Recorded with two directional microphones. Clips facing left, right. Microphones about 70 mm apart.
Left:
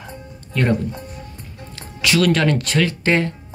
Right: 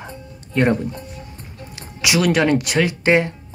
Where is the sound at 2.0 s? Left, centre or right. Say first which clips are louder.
Even; centre.